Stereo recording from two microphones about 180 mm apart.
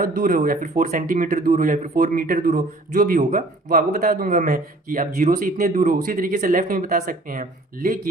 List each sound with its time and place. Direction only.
0.0 s speech: 50° right (ahead or behind)